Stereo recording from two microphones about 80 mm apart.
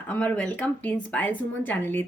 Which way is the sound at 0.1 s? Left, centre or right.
Centre.